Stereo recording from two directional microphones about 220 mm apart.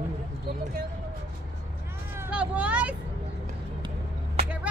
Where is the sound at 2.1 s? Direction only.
5° right (ahead or behind).